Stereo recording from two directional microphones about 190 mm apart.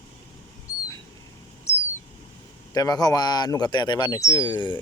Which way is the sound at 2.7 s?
20° left (ahead or behind).